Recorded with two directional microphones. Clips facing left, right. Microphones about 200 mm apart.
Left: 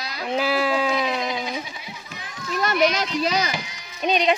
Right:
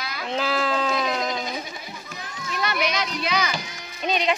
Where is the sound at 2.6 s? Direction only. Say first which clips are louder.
Left 5 dB; 45° left (ahead or behind).